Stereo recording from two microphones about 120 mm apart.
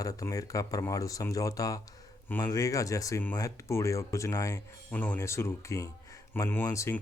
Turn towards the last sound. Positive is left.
turn(degrees=25)  # may be behind; listen again after turning